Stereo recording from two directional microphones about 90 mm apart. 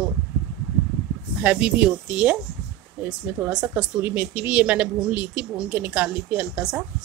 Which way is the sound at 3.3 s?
25° right (ahead or behind).